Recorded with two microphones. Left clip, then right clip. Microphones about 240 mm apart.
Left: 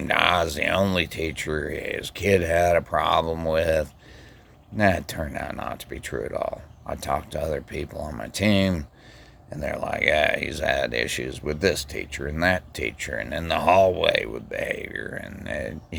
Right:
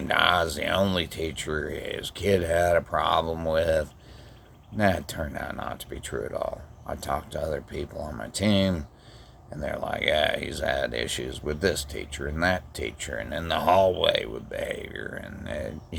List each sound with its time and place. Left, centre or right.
0.1 s speech: left